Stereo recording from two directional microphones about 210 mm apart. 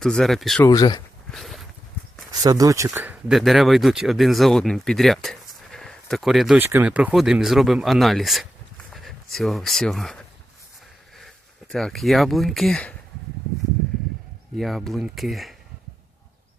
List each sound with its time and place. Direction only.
0.0 s speech: centre (ahead or behind)
0.6 s speech: 20° left (ahead or behind)
1.3 s a sound: centre (ahead or behind)
2.3 s speech: 20° right (ahead or behind); by 10.2 s centre (ahead or behind)
11.7 s speech: centre (ahead or behind)
14.5 s speech: centre (ahead or behind)